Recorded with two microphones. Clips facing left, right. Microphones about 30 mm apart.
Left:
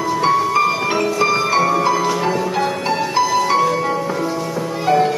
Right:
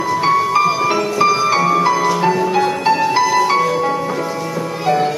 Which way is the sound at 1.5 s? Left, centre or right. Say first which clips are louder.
Right 2 dB; centre.